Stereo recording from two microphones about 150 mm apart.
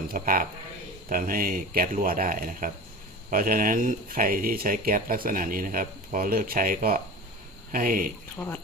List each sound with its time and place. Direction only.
0.1 s speech: 70° right (ahead or behind)